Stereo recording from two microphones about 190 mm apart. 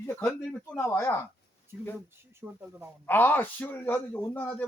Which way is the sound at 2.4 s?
10° right (ahead or behind).